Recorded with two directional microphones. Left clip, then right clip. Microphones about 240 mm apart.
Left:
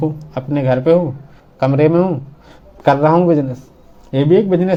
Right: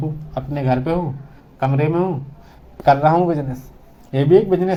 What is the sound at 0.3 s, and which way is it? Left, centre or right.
A man's voice, left.